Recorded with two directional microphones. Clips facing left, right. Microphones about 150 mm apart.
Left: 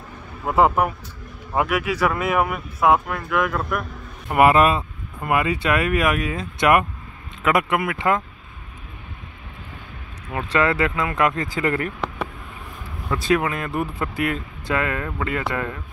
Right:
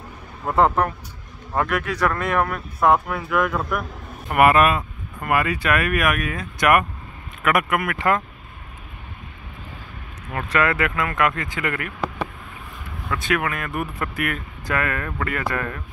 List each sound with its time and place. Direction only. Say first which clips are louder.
0.5 s speech: left 1 dB; 5° left (ahead or behind)
4.3 s speech: left 1 dB; 25° left (ahead or behind)
10.5 s speech: left 1 dB; 25° left (ahead or behind)
13.2 s speech: left 4 dB; 30° left (ahead or behind)